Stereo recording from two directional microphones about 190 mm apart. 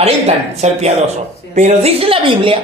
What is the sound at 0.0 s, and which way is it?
A man's voice, 35° right (ahead or behind).